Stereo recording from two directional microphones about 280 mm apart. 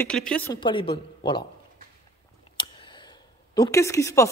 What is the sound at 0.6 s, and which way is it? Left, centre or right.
Speech, centre.